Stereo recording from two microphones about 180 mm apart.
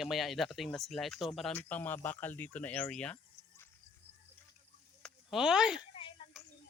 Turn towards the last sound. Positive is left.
turn(degrees=30)  # may be behind; listen again after turning